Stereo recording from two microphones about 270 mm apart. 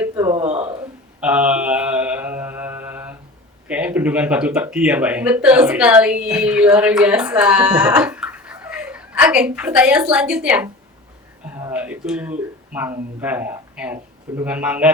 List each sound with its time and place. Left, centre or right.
0.0 s a sound: centre
1.2 s mantra: centre
3.7 s a woman's voice: centre